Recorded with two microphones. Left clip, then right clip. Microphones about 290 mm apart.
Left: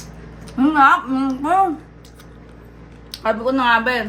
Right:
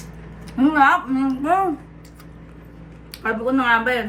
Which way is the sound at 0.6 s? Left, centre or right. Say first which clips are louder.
Left 2 dB; centre.